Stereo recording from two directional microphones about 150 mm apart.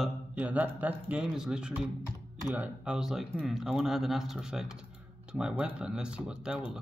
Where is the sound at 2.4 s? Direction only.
20° right (ahead or behind).